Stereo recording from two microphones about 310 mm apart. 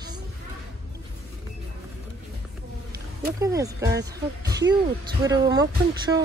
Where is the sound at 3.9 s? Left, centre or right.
Right.